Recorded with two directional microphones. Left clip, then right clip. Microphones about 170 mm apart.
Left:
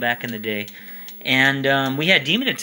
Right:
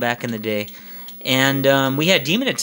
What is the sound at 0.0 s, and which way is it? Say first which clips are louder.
A man's voice: right 1 dB; 35° right (ahead or behind).